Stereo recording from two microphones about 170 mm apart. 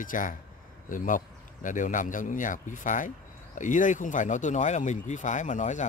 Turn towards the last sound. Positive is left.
turn(degrees=45)  # may be behind; listen again after turning